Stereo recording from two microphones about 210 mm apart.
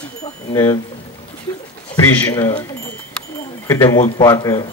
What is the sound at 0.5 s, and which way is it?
Speech, 15° left (ahead or behind).